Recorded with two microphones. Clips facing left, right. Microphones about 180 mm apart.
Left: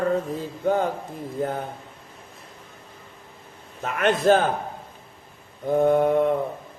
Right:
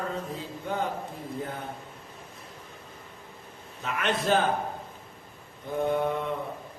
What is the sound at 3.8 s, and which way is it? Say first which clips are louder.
Mantra: left 7 dB; 50° left (ahead or behind).